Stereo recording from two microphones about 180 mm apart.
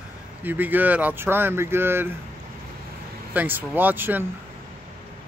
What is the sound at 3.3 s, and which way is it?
Speech, 10° right (ahead or behind).